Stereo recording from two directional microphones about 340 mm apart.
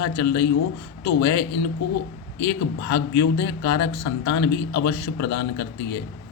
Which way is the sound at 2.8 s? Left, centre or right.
Left.